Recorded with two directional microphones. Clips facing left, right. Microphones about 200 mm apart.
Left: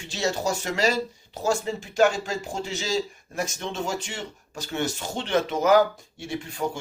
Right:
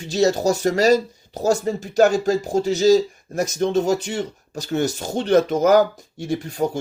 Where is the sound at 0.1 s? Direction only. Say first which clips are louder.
Right 9 dB; 40° right (ahead or behind).